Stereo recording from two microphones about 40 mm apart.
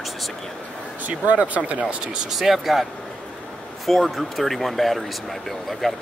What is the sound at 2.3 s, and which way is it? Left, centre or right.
Speech, centre.